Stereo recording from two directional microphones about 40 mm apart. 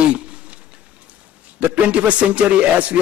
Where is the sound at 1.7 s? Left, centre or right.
Right.